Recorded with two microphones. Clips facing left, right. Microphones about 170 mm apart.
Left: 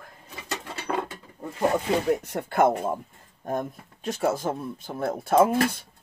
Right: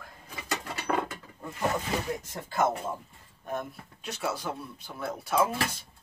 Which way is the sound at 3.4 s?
45° left (ahead or behind).